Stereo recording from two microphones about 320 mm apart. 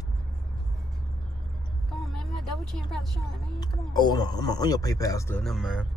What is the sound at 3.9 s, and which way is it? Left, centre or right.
Speech, centre.